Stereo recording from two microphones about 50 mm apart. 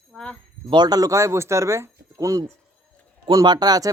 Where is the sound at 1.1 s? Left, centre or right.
Right.